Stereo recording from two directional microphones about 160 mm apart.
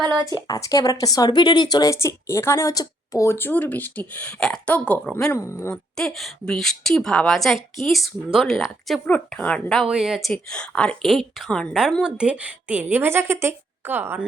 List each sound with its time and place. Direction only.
0.0 s a woman's voice: 30° right (ahead or behind)
0.4 s a woman's voice: 25° left (ahead or behind)
5.7 s a woman's voice: 5° left (ahead or behind); by 14.3 s 10° right (ahead or behind)